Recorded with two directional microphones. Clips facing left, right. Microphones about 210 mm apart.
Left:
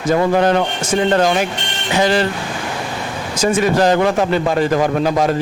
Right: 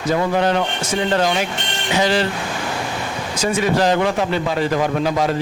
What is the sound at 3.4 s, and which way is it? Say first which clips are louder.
A man's voice: left 3 dB; 45° left (ahead or behind).